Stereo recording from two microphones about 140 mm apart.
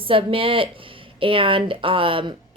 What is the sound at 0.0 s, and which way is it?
Speech, 40° right (ahead or behind).